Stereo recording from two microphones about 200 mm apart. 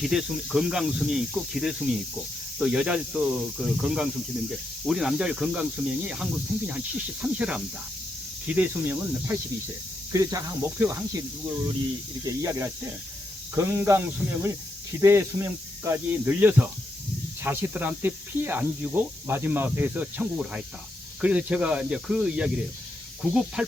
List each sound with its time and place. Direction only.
0.0 s speech: centre (ahead or behind)
12.2 s speech: 15° right (ahead or behind)